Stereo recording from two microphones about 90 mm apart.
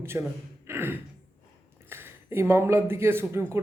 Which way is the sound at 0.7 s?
25° right (ahead or behind).